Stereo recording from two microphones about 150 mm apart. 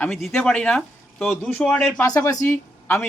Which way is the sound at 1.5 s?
15° left (ahead or behind).